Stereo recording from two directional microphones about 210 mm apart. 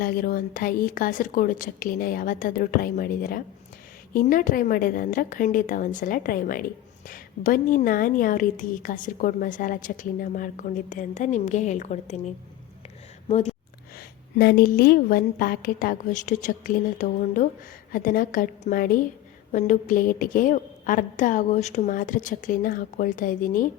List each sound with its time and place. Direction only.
0.0 s a woman's voice: 45° left (ahead or behind)
13.2 s a sound: 30° left (ahead or behind)
13.9 s a woman's voice: 50° left (ahead or behind)